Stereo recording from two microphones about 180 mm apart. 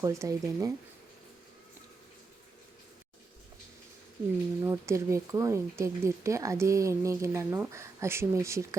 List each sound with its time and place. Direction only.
0.0 s speech: 15° right (ahead or behind)
4.6 s speech: 15° right (ahead or behind)